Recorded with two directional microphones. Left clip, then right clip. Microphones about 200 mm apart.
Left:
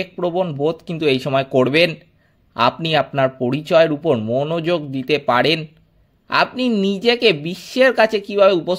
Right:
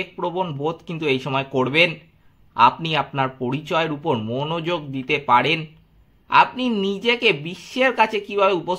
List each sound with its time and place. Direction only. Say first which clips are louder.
0.0 s speech: left 4 dB; 25° left (ahead or behind)